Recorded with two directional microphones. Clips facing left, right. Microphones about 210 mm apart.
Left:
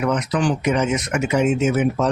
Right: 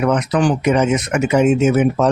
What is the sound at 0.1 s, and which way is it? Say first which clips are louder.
Speech: right 4 dB; 55° right (ahead or behind).